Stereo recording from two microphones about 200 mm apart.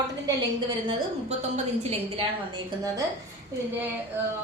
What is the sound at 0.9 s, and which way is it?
A woman's voice, 35° right (ahead or behind).